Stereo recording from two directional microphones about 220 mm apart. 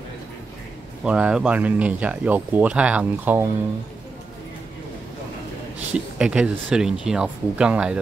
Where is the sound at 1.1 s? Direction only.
5° right (ahead or behind).